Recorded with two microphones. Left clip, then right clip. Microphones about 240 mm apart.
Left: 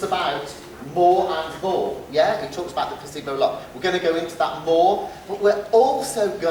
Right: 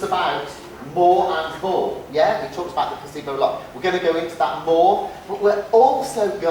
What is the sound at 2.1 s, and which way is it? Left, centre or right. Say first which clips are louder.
Speech: right 1 dB; centre.